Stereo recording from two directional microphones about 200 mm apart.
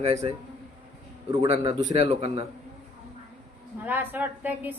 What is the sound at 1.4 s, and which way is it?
A man's voice, 30° right (ahead or behind).